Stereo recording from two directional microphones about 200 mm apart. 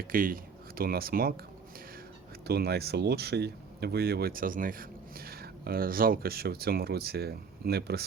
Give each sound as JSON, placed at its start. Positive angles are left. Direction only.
{"t": 0.1, "sound": "speech", "side_deg": -45}
{"t": 2.5, "sound": "speech", "side_deg": -55}